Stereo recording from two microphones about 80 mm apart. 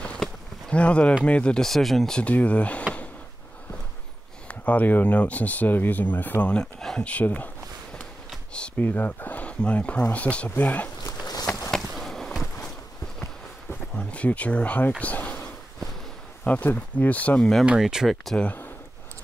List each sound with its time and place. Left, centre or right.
0.0 s a sound: centre
1.2 s speech: centre
4.5 s speech: centre
11.7 s skateboard: centre
13.2 s a sound: centre
16.4 s speech: left
17.4 s speech: centre
17.6 s speech: centre
18.4 s speech: left